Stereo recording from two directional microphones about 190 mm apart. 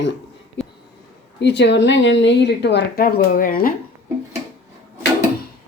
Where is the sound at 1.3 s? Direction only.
65° left (ahead or behind); by 3.7 s 50° left (ahead or behind).